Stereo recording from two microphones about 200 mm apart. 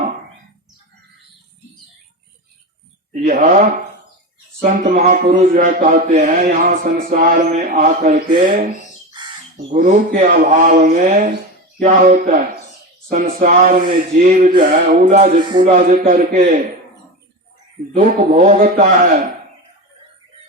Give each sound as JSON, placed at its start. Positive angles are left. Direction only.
{"t": 3.1, "sound": "speech", "side_deg": -35}
{"t": 4.9, "sound": "speech", "side_deg": -40}
{"t": 9.2, "sound": "crow", "side_deg": -20}
{"t": 9.7, "sound": "speech", "side_deg": -40}
{"t": 17.9, "sound": "speech", "side_deg": -35}